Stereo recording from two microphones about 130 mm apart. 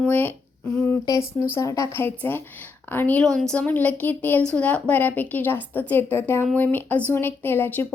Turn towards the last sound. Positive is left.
turn(degrees=15)  # may be behind; listen again after turning